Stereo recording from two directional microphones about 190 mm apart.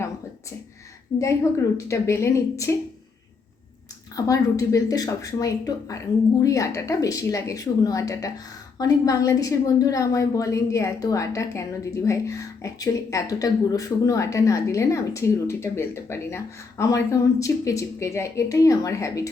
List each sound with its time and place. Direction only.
1.2 s a woman's voice: 15° left (ahead or behind)
4.1 s a woman's voice: 15° left (ahead or behind)